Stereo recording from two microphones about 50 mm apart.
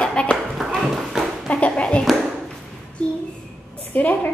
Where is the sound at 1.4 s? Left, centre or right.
Left.